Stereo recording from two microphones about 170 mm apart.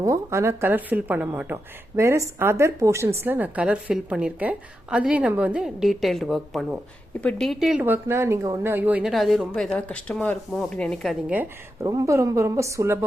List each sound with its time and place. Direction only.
0.0 s a woman's voice: 15° right (ahead or behind); by 11.3 s centre (ahead or behind)
11.3 s a woman's voice: 20° right (ahead or behind)